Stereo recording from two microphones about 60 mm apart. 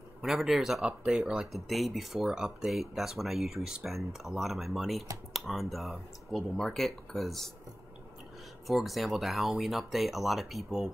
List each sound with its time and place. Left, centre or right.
0.2 s speech: centre
1.4 s speech: centre
8.6 s speech: centre